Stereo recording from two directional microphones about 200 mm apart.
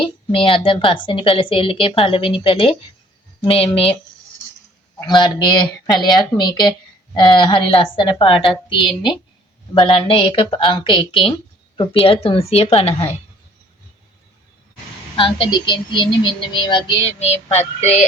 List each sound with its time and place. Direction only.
0.0 s a woman's voice: 25° left (ahead or behind)
4.9 s a woman's voice: 20° left (ahead or behind)
15.1 s a woman's voice: 25° left (ahead or behind)